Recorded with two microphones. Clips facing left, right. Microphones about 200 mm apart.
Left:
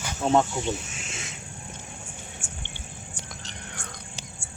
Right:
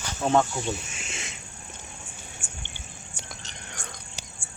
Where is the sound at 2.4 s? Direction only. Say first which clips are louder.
Left 3 dB; 40° left (ahead or behind).